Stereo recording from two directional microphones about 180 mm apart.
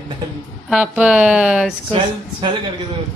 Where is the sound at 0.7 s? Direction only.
5° right (ahead or behind).